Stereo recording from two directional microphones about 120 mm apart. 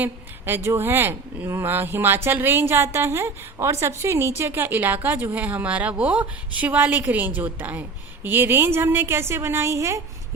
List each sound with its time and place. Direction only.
0.0 s speech: 20° right (ahead or behind)